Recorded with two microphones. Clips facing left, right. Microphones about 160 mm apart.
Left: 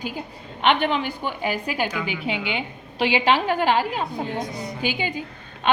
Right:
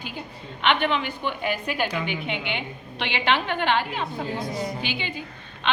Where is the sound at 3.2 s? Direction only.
40° left (ahead or behind).